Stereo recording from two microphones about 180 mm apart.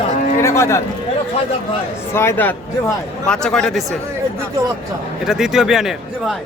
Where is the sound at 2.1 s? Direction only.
10° left (ahead or behind).